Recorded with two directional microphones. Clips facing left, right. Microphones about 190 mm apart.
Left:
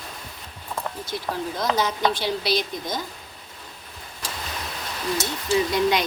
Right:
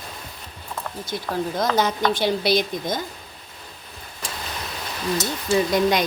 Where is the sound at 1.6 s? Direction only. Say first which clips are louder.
Right 2 dB; 50° right (ahead or behind).